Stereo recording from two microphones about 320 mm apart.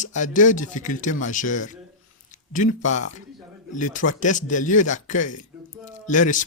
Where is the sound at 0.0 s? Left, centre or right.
Left.